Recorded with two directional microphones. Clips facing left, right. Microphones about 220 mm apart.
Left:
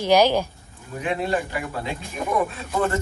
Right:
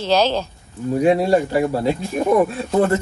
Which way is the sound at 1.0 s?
40° right (ahead or behind).